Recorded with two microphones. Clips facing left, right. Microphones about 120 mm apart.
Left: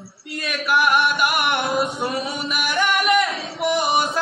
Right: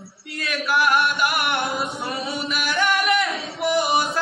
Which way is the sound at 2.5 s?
15° left (ahead or behind).